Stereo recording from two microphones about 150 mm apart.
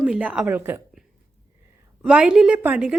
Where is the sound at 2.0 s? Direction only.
5° right (ahead or behind).